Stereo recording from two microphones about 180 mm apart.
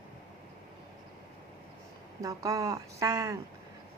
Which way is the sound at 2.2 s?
20° right (ahead or behind).